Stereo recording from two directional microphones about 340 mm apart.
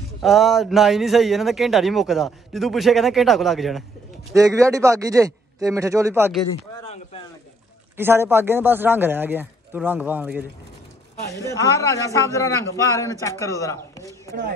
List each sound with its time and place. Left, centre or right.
0.2 s a man's voice: centre
6.9 s a sound: centre
8.0 s speech: centre
11.2 s a man's voice: centre